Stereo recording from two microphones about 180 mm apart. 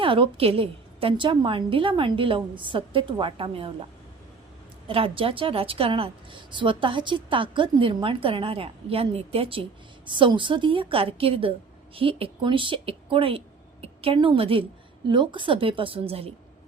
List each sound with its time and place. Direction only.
0.0 s a woman's voice: 30° right (ahead or behind)
4.9 s a woman's voice: 30° right (ahead or behind)